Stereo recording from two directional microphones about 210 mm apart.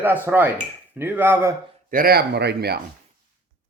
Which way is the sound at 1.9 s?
45° right (ahead or behind).